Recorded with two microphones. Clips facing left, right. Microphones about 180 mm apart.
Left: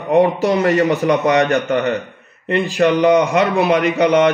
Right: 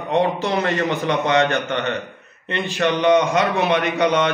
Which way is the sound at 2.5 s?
35° left (ahead or behind).